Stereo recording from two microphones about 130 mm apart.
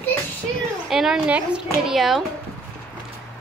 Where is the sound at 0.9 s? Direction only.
5° right (ahead or behind).